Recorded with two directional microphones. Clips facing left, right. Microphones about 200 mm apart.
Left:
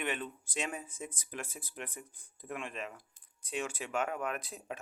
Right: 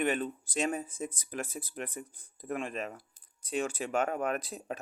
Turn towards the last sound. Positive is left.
turn(degrees=-35)  # may be behind; listen again after turning